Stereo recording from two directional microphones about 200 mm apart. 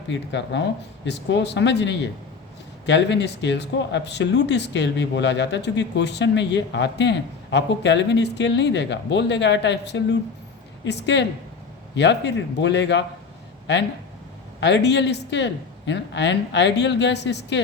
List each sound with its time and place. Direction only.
0.1 s speech: 65° left (ahead or behind)
14.6 s speech: 60° left (ahead or behind)